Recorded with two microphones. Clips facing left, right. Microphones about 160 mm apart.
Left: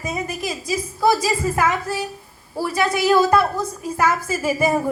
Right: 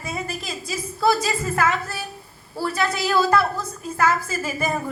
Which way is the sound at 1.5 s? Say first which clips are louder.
Left 2 dB; 20° left (ahead or behind).